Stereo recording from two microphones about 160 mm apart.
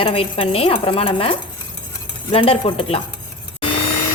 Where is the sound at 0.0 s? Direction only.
35° left (ahead or behind).